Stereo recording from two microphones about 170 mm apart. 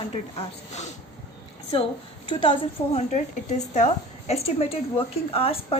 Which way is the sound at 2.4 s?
35° left (ahead or behind).